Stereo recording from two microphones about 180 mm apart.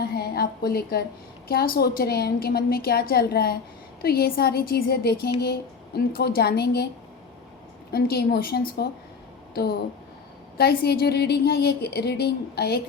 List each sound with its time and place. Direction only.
0.1 s a sound: 60° left (ahead or behind)
1.5 s a woman's voice: 55° left (ahead or behind)
7.9 s a woman's voice: 60° left (ahead or behind)
10.6 s a woman's voice: 60° left (ahead or behind)